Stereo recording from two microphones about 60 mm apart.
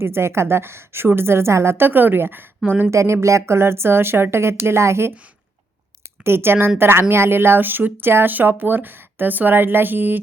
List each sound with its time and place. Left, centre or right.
0.0 s a woman's voice: right
2.9 s a woman's voice: right
6.2 s speech: right